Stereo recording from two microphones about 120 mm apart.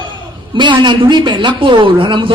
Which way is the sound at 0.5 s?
40° right (ahead or behind).